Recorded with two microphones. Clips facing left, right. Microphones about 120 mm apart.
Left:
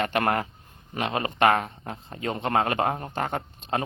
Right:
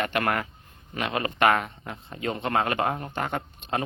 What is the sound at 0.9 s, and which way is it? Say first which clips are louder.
Speech: left 1 dB; 35° left (ahead or behind).